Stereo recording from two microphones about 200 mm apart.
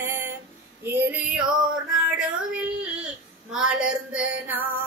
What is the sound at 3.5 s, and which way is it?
Female singing, 5° right (ahead or behind).